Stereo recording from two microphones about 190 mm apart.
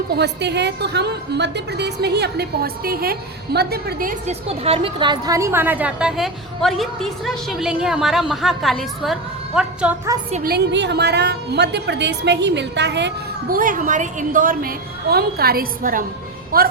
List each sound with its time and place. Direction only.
0.2 s a woman's voice: 60° right (ahead or behind); by 4.4 s 45° right (ahead or behind)
4.4 s a woman's voice: 30° right (ahead or behind); by 9.7 s 5° right (ahead or behind)
10.1 s a woman's voice: 20° right (ahead or behind)
10.4 s a woman's voice: 60° right (ahead or behind)